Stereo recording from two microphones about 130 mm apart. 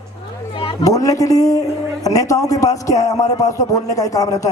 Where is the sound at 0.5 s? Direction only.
45° left (ahead or behind).